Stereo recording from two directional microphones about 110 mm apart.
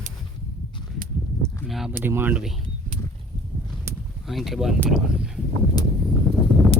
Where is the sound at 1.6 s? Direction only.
Centre (ahead or behind).